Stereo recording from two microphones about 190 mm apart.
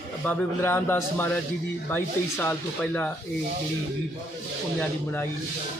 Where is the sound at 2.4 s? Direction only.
10° left (ahead or behind).